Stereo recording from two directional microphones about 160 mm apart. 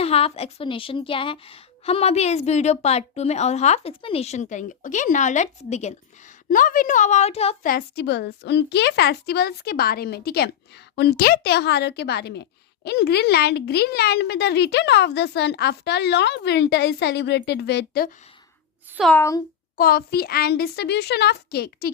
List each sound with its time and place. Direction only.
0.0 s a woman's voice: 40° left (ahead or behind)
6.5 s a woman's voice: 60° left (ahead or behind); by 7.5 s 40° left (ahead or behind)
7.6 s a woman's voice: 70° left (ahead or behind)
19.1 s a child's voice: 20° left (ahead or behind)
19.7 s a child's voice: 65° left (ahead or behind)